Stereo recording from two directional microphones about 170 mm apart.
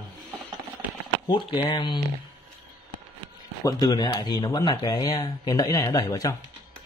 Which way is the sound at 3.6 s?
25° left (ahead or behind).